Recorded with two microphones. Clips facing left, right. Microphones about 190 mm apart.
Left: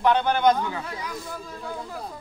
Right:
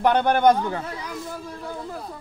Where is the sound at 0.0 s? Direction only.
55° right (ahead or behind).